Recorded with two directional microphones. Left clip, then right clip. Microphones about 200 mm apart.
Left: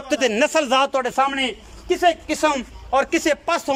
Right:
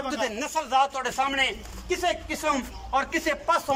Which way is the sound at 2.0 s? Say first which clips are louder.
Left 10 dB; 50° left (ahead or behind).